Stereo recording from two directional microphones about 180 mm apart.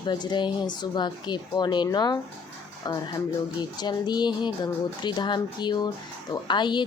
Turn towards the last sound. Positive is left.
turn(degrees=25)  # may be behind; listen again after turning